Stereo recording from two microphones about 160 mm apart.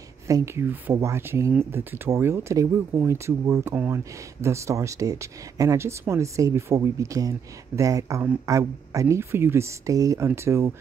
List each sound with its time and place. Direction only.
0.3 s speech: 20° right (ahead or behind)